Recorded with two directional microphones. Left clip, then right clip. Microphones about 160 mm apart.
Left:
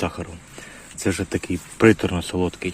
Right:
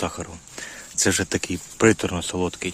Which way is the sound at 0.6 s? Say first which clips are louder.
Right 11 dB; 30° right (ahead or behind).